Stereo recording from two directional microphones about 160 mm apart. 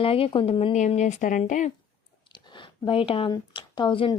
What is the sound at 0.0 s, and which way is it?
Speech, 35° left (ahead or behind).